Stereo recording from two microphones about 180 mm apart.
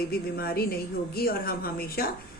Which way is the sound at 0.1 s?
55° left (ahead or behind).